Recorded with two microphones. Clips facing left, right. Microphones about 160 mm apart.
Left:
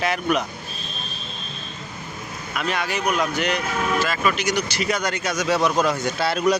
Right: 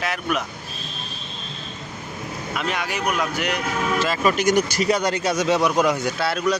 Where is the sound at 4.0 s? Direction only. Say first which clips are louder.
Right 2 dB; 30° right (ahead or behind).